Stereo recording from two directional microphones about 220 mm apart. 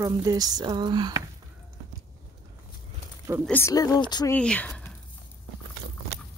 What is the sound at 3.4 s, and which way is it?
Speech, 10° left (ahead or behind).